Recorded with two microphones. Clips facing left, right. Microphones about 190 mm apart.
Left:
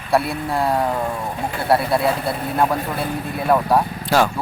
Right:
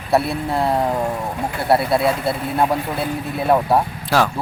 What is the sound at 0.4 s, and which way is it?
Vehicle, 25° right (ahead or behind).